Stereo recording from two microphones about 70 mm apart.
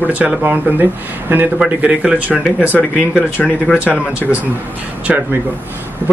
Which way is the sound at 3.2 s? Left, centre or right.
Left.